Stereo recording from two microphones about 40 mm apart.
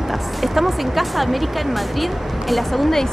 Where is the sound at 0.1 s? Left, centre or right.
Centre.